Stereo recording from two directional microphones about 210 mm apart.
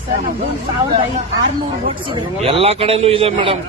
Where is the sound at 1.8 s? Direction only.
25° right (ahead or behind).